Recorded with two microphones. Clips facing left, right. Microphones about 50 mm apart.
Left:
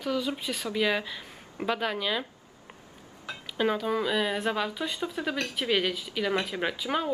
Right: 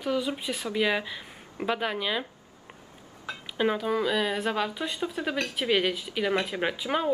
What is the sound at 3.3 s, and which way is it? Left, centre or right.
Speech, centre.